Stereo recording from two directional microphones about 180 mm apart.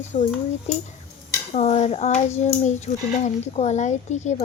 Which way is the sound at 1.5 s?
40° left (ahead or behind).